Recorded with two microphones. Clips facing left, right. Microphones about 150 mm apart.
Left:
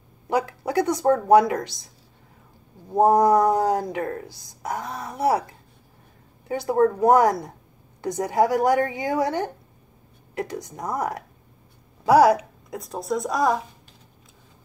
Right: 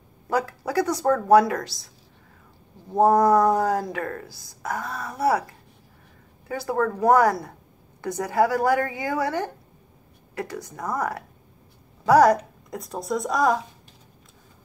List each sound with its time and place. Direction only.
0.3 s speech: 25° left (ahead or behind)
2.9 s speech: 15° left (ahead or behind)
6.5 s speech: 20° left (ahead or behind)
12.1 s a woman's voice: 10° left (ahead or behind)